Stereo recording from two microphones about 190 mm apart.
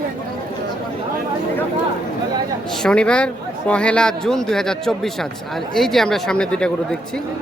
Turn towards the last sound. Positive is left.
turn(degrees=5)  # may be behind; listen again after turning